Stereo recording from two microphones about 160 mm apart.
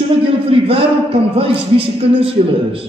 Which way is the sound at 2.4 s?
40° right (ahead or behind).